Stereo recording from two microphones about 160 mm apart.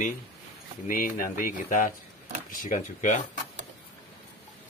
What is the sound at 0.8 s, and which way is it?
Speech, 60° left (ahead or behind).